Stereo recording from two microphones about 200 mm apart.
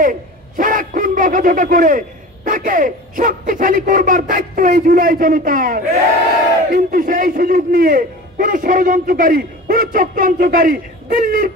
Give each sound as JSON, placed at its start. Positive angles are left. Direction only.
{"t": 0.0, "sound": "a man's voice", "side_deg": -40}